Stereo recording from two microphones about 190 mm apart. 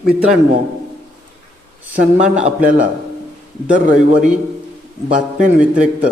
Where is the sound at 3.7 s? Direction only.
45° right (ahead or behind).